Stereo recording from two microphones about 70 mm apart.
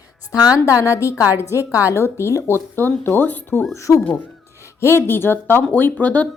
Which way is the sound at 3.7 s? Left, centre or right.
Left.